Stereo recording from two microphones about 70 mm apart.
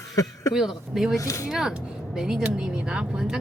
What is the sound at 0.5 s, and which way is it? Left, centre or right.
Speech, centre.